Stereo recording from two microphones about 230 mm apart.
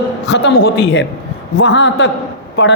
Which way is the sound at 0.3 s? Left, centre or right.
Left.